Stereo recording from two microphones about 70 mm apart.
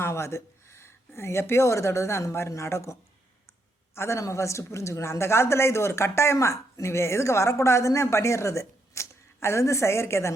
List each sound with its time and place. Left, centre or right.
0.0 s a woman's voice: left